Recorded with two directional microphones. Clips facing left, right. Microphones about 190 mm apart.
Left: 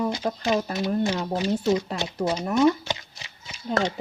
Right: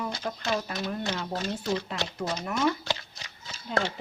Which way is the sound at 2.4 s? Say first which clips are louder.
Left 8 dB; 30° left (ahead or behind).